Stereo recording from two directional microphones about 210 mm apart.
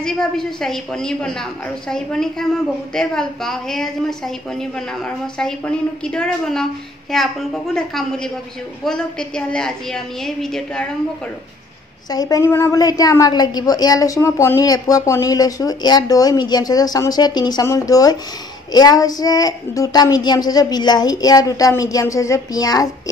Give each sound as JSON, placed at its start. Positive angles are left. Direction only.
{"t": 0.0, "sound": "a woman's voice", "side_deg": 0}
{"t": 12.1, "sound": "a woman's voice", "side_deg": 15}